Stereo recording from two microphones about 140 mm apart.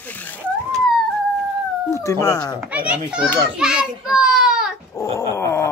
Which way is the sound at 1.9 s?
20° left (ahead or behind).